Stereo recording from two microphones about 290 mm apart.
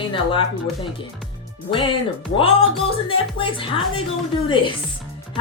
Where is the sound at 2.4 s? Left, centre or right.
Centre.